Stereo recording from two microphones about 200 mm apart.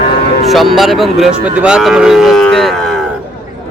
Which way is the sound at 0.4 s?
Centre (ahead or behind).